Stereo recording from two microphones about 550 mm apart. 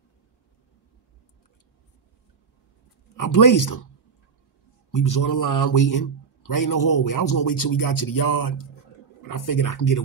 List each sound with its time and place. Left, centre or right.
3.2 s a man's voice: left
4.9 s a man's voice: left